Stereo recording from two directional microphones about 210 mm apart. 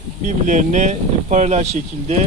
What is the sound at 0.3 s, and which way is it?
Speech, 35° right (ahead or behind).